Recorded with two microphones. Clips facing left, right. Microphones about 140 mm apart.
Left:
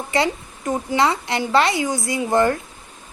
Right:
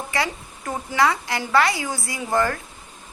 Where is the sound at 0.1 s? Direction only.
25° left (ahead or behind).